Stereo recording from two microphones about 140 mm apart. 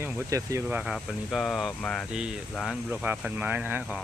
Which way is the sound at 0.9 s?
Centre (ahead or behind).